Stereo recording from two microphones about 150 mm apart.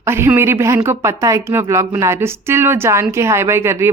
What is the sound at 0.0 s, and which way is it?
Speech, 15° right (ahead or behind).